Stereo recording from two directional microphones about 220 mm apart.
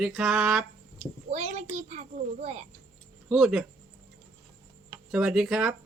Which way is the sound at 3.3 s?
Centre (ahead or behind).